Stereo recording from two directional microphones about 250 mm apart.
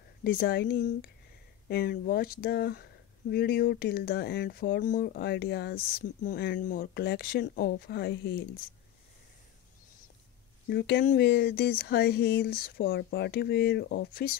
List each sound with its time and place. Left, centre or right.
0.2 s speech: left
10.7 s speech: left